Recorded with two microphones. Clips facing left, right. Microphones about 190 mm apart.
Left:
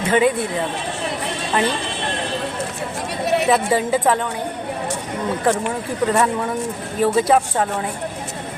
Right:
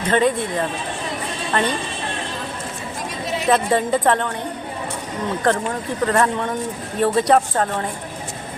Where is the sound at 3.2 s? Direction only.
65° left (ahead or behind).